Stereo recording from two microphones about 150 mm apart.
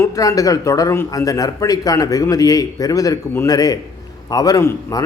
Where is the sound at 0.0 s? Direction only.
20° left (ahead or behind).